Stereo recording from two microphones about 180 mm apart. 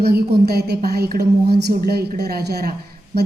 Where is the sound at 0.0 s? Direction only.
60° right (ahead or behind).